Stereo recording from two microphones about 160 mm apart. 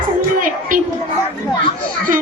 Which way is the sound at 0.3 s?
55° right (ahead or behind).